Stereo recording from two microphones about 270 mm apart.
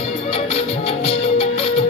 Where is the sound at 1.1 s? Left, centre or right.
Left.